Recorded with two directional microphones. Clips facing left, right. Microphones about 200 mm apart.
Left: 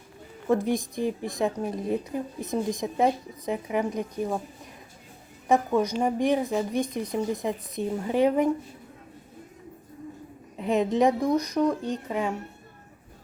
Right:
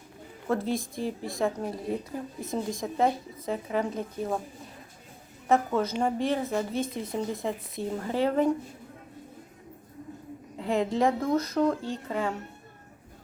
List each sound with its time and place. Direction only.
0.4 s a woman's voice: 15° left (ahead or behind)
5.5 s a woman's voice: 15° left (ahead or behind)
10.6 s a woman's voice: 20° left (ahead or behind)